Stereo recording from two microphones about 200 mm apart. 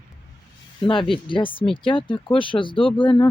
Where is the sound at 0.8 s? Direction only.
25° left (ahead or behind).